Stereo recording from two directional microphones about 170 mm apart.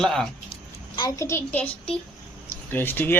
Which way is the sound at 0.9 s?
20° left (ahead or behind).